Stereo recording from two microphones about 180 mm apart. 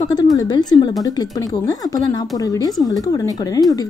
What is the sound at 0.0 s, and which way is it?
A woman's voice, 20° left (ahead or behind).